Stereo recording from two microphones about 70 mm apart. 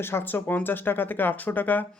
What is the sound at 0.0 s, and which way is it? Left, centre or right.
Speech, left.